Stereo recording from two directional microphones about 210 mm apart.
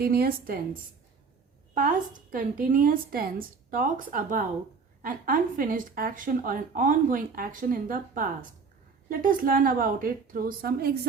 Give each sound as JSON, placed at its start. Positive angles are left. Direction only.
{"t": 0.0, "sound": "a woman's voice", "side_deg": -45}